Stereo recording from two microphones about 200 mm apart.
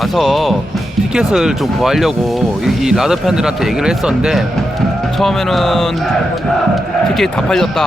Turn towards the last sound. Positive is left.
turn(degrees=0)  # may be behind; listen again after turning